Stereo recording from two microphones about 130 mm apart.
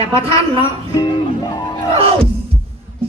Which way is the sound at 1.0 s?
30° left (ahead or behind).